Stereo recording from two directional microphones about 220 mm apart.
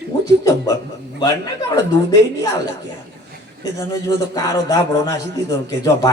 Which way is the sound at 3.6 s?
15° left (ahead or behind).